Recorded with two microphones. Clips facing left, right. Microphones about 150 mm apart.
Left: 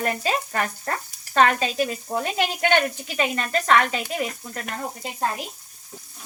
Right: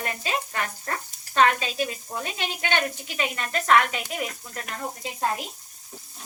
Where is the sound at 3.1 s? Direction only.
40° left (ahead or behind).